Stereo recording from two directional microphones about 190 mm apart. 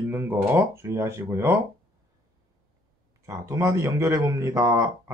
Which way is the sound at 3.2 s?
15° right (ahead or behind).